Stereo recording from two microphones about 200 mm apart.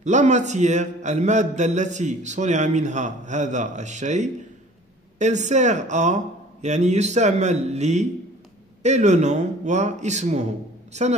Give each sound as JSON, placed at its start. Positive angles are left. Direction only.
{"t": 0.0, "sound": "a man's voice", "side_deg": -35}